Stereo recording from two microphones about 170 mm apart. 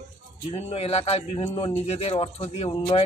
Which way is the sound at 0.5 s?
35° left (ahead or behind).